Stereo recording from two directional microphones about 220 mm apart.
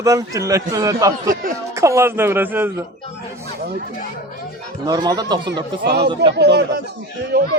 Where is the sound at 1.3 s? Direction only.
35° right (ahead or behind).